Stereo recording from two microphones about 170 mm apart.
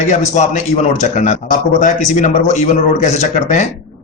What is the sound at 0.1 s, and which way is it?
A man's voice, 45° left (ahead or behind).